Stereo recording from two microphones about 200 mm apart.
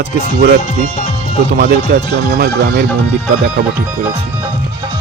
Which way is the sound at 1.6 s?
45° right (ahead or behind).